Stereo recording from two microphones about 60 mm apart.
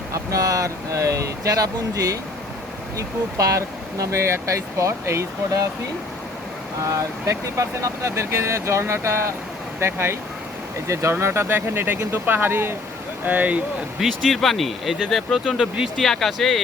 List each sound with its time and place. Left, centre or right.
0.1 s speech: right
3.0 s speech: right
6.8 s speech: right
13.2 s speech: right
14.0 s speech: centre